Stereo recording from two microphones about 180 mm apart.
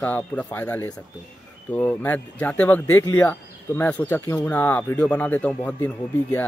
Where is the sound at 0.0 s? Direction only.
10° left (ahead or behind).